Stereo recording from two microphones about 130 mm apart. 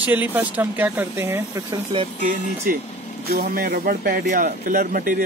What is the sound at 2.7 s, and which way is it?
Speech, 90° right.